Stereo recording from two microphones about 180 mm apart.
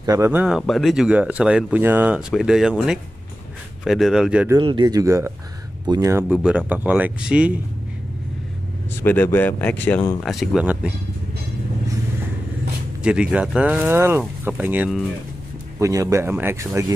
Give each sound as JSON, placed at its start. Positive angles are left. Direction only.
{"t": 0.0, "sound": "speech", "side_deg": -15}
{"t": 4.6, "sound": "speech", "side_deg": -25}
{"t": 9.0, "sound": "speech", "side_deg": 10}
{"t": 13.0, "sound": "speech", "side_deg": -5}